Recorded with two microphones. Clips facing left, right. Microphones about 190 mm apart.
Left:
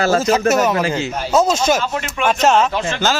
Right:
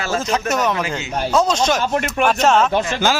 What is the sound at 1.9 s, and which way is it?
Speech, 55° right (ahead or behind).